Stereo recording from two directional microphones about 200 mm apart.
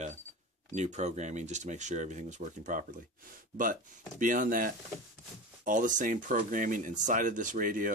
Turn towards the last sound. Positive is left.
turn(degrees=-45)  # may be behind; listen again after turning